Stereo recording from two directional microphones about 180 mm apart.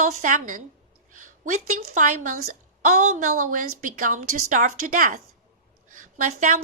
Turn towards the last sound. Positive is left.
turn(degrees=-45)  # may be behind; listen again after turning